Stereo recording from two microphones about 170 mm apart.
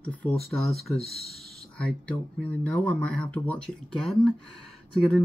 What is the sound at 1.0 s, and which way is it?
Speech, 65° right (ahead or behind).